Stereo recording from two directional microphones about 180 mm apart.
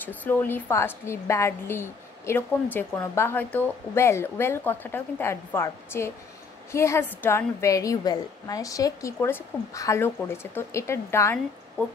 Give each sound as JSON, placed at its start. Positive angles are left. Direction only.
{"t": 0.0, "sound": "a woman's voice", "side_deg": 10}